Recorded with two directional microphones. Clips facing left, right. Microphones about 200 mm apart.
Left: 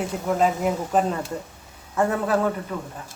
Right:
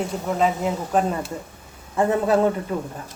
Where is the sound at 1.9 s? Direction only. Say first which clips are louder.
Right 3 dB; 20° right (ahead or behind).